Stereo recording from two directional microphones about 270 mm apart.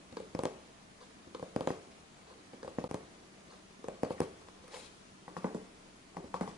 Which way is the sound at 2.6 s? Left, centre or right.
Centre.